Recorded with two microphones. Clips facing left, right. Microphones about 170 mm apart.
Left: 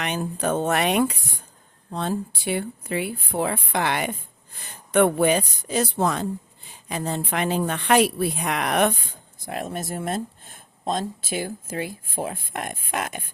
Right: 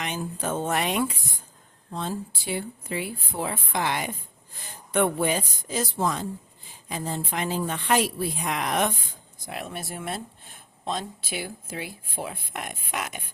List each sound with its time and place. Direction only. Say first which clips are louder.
0.0 s speech: left 5 dB; 65° left (ahead or behind)
9.5 s speech: left 5 dB; 45° left (ahead or behind)